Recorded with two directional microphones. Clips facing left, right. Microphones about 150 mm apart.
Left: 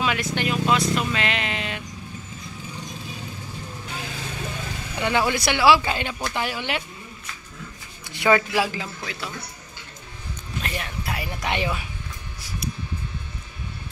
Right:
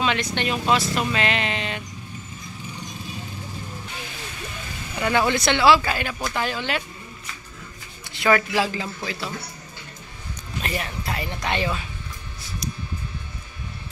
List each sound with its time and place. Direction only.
0.0 s speech: 5° left (ahead or behind)
5.0 s speech: 10° left (ahead or behind)
8.1 s speech: 20° left (ahead or behind)
8.7 s speech: centre (ahead or behind)
10.6 s speech: centre (ahead or behind); by 11.9 s 15° left (ahead or behind)